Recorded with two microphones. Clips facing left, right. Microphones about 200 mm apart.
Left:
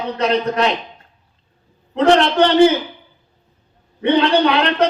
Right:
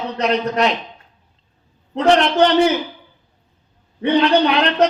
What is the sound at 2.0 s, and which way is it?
Speech, 30° left (ahead or behind).